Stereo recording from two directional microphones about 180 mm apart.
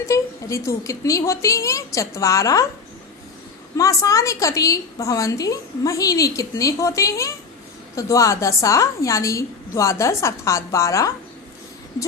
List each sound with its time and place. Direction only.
0.0 s a woman's voice: 15° left (ahead or behind)
3.8 s a woman's voice: 20° left (ahead or behind)